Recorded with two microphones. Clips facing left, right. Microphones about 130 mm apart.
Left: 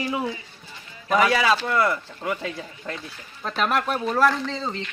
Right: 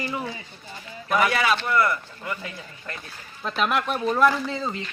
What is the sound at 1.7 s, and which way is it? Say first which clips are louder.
A man's voice: even; 20° left (ahead or behind).